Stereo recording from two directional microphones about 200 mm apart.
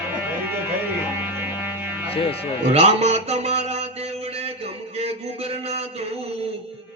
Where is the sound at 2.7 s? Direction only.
30° right (ahead or behind).